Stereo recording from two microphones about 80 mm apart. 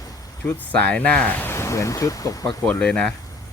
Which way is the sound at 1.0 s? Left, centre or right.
Centre.